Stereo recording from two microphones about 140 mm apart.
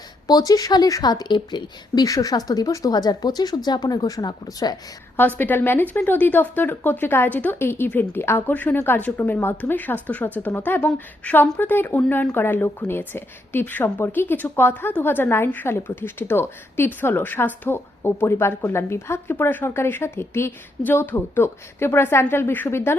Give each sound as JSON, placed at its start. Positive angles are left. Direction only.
{"t": 0.3, "sound": "a woman's voice", "side_deg": 25}
{"t": 5.4, "sound": "speech", "side_deg": 15}